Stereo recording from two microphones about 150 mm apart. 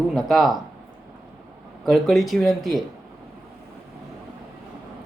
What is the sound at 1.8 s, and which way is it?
Speech, centre (ahead or behind).